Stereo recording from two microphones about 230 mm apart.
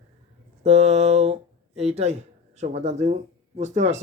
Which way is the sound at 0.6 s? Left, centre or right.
Right.